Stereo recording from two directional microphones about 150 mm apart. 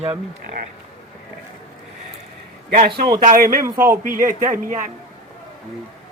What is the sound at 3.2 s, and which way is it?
Speech, 70° right (ahead or behind).